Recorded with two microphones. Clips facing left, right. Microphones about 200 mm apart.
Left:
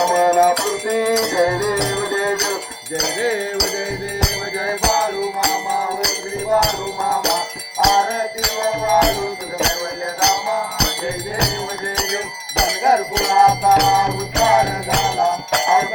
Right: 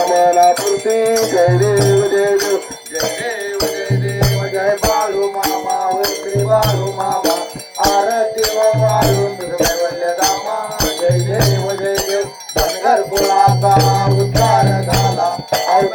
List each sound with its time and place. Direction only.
0.0 s music: 40° right (ahead or behind)
4.2 s music: 55° right (ahead or behind)
7.8 s music: 50° right (ahead or behind)